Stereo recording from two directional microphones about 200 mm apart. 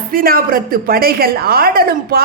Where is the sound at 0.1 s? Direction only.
45° right (ahead or behind).